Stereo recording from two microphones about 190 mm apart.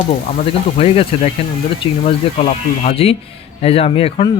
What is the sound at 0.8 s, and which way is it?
Speech, 30° left (ahead or behind).